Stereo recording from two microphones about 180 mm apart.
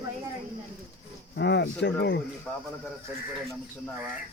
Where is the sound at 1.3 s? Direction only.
70° left (ahead or behind).